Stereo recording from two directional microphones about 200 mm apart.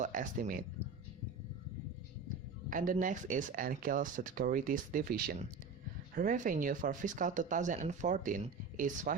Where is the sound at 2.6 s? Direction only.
40° right (ahead or behind).